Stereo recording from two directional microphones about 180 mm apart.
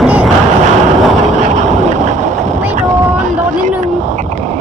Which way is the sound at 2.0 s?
40° right (ahead or behind).